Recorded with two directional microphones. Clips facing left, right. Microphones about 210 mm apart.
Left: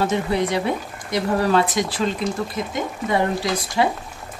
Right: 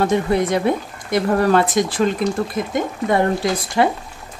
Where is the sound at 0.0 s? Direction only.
50° right (ahead or behind).